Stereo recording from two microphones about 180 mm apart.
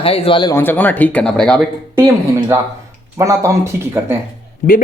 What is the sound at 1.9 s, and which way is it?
Speech, 15° right (ahead or behind).